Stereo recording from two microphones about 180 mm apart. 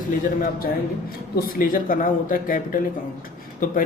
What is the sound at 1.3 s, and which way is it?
Speech, 50° left (ahead or behind).